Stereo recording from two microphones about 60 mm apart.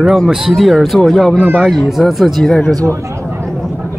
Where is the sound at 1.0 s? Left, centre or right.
Centre.